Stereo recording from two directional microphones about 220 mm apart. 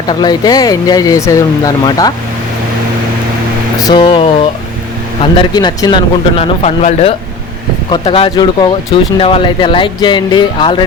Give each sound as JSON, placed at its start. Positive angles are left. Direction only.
{"t": 0.1, "sound": "speech", "side_deg": 20}
{"t": 3.8, "sound": "speech", "side_deg": 20}